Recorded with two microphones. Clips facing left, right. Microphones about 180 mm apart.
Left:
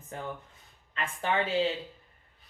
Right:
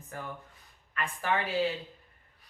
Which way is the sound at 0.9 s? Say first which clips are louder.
Left 1 dB; 25° left (ahead or behind).